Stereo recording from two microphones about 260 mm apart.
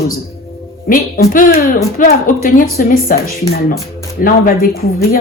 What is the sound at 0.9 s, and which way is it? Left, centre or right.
A woman's voice, left.